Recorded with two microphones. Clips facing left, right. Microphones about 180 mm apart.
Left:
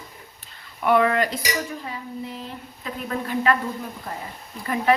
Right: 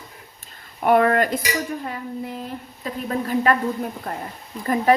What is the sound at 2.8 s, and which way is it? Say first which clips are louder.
Speech: right 3 dB; 40° right (ahead or behind).